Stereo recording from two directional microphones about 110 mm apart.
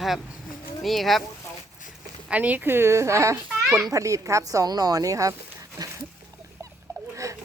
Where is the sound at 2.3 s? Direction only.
15° right (ahead or behind); by 5.3 s 30° right (ahead or behind).